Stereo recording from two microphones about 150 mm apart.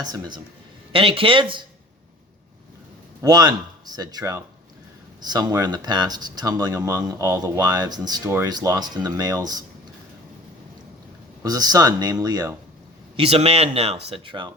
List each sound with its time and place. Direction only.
0.0 s speech: 25° right (ahead or behind)
3.2 s speech: 25° right (ahead or behind)
11.4 s speech: 25° right (ahead or behind)
13.1 s speech: 40° right (ahead or behind)